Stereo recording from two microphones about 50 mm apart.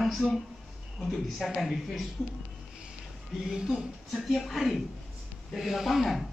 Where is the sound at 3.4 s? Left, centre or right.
Centre.